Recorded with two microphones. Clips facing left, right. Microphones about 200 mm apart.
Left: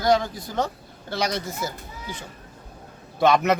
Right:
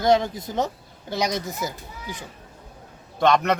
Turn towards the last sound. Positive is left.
turn(degrees=5)  # may be behind; listen again after turning